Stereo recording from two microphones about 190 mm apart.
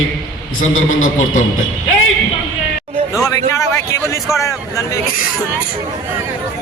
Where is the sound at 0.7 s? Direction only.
90° left.